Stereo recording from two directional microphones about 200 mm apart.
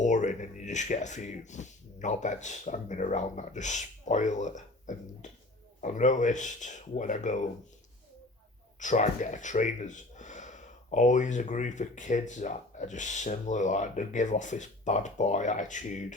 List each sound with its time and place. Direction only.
0.0 s speech: 35° left (ahead or behind)
8.8 s speech: 40° left (ahead or behind)